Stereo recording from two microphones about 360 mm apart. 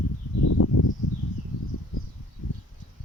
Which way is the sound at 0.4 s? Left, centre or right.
Left.